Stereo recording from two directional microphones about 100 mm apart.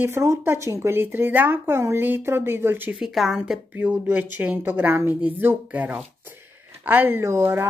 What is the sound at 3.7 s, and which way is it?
Speech, 20° right (ahead or behind).